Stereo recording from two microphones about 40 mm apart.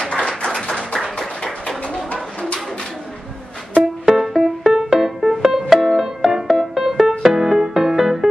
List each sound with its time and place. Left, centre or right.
0.0 s a sound: centre
4.0 s music: centre
4.7 s keyboard: centre
5.0 s music: centre